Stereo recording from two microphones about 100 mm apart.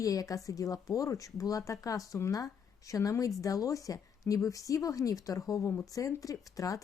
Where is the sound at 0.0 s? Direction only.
35° left (ahead or behind).